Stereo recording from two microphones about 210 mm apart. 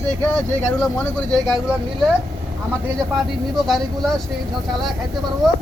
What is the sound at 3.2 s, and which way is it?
Speech, centre (ahead or behind).